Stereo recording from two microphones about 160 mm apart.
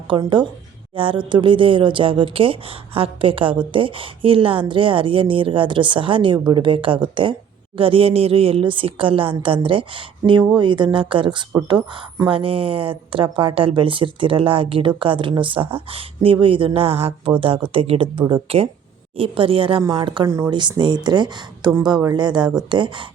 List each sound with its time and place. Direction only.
0.1 s a woman's voice: 30° right (ahead or behind)
20.2 s a woman's voice: 20° right (ahead or behind)